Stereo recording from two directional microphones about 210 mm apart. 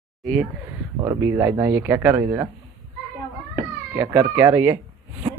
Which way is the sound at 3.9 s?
10° right (ahead or behind).